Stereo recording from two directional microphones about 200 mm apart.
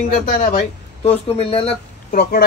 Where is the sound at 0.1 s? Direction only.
40° left (ahead or behind).